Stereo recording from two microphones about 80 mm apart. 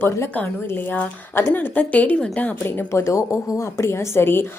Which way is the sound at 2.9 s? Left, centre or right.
Left.